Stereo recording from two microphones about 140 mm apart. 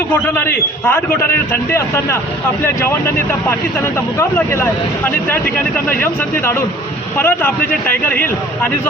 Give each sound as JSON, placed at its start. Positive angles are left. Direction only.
{"t": 0.9, "sound": "a man's voice", "side_deg": 15}